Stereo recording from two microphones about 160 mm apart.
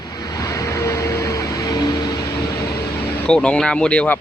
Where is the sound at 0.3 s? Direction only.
20° left (ahead or behind).